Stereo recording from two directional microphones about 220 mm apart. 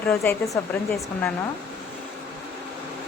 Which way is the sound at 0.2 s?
10° left (ahead or behind).